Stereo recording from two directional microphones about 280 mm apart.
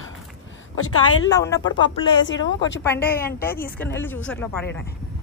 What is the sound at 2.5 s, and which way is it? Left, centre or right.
Speech, left.